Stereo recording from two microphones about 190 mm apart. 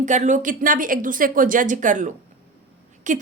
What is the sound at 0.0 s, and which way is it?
A woman's voice, 40° right (ahead or behind).